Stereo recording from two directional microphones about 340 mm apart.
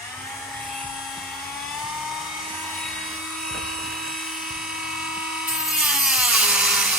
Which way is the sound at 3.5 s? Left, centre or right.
Centre.